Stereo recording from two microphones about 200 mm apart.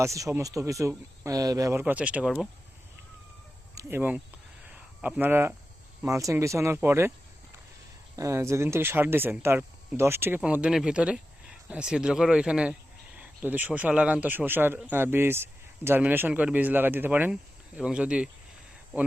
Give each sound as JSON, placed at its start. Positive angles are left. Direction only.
{"t": 0.0, "sound": "speech", "side_deg": -15}
{"t": 3.8, "sound": "speech", "side_deg": -10}
{"t": 8.1, "sound": "speech", "side_deg": -15}